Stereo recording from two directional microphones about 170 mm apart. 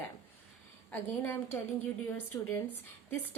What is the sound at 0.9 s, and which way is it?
A woman's voice, 10° left (ahead or behind).